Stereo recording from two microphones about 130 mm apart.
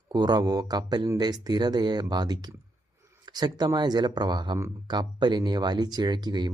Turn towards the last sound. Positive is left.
turn(degrees=-35)  # may be behind; listen again after turning